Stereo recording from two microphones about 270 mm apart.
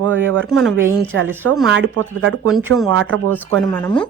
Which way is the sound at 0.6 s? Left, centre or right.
Centre.